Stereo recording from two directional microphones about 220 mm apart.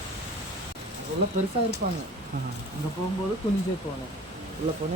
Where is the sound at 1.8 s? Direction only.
40° right (ahead or behind).